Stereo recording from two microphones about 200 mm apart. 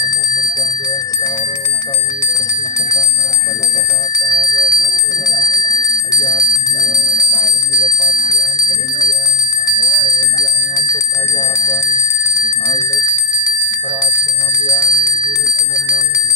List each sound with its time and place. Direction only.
4.3 s bicycle bell: 15° left (ahead or behind)
10.2 s bicycle bell: 15° left (ahead or behind)
12.3 s bicycle bell: 15° left (ahead or behind)
14.7 s bicycle bell: 15° left (ahead or behind)